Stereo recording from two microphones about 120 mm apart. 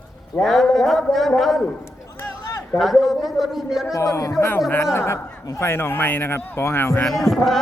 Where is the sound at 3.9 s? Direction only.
25° left (ahead or behind).